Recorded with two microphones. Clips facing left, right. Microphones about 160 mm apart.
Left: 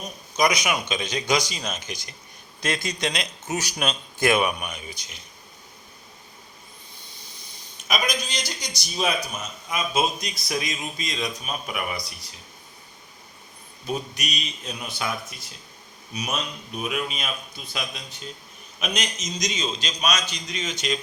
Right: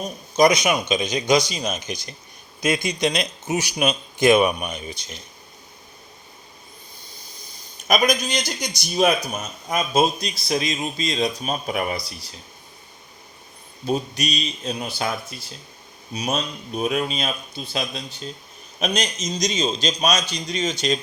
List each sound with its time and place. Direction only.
0.3 s speech: 25° right (ahead or behind)
7.9 s a man's voice: 45° right (ahead or behind)
13.8 s a man's voice: 30° right (ahead or behind)